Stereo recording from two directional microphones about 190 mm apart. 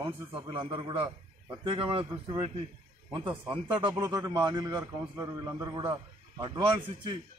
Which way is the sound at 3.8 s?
20° right (ahead or behind).